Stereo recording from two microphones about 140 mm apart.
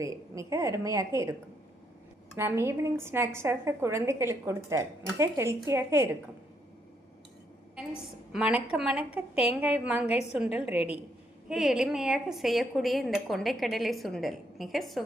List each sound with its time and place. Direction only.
0.0 s a woman's voice: 20° right (ahead or behind)
8.3 s a woman's voice: 5° right (ahead or behind)